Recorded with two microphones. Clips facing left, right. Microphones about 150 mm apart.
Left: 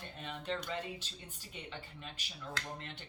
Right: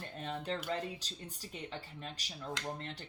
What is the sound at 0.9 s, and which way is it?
Speech, 40° right (ahead or behind).